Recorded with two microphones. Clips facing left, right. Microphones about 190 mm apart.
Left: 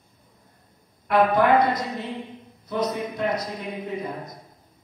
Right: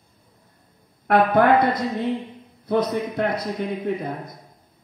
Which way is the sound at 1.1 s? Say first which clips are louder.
Right 2 dB; 60° right (ahead or behind).